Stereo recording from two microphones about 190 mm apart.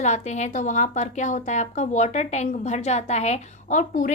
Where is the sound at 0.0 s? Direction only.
35° left (ahead or behind).